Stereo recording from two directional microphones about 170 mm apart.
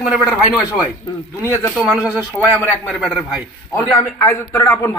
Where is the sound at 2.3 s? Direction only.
10° left (ahead or behind).